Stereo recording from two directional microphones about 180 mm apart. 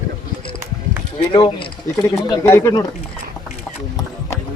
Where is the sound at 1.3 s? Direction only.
30° left (ahead or behind).